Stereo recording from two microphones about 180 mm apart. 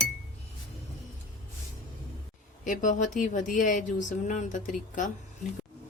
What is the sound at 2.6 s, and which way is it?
Speech, 45° left (ahead or behind).